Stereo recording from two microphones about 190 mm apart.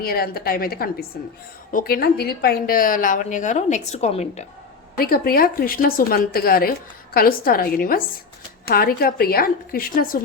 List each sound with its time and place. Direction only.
0.0 s a woman's voice: 55° left (ahead or behind); by 4.4 s 35° left (ahead or behind)
4.9 s a woman's voice: 50° left (ahead or behind)